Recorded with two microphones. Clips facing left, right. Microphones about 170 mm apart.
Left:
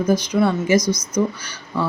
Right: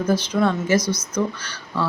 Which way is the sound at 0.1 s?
10° left (ahead or behind).